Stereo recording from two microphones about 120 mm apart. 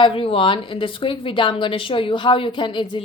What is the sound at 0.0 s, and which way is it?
A woman's voice, 50° left (ahead or behind).